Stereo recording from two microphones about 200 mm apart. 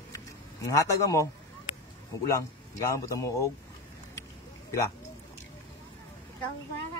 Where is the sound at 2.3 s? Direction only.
15° left (ahead or behind).